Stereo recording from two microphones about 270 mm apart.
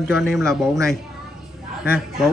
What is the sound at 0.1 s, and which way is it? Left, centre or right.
Speech, centre.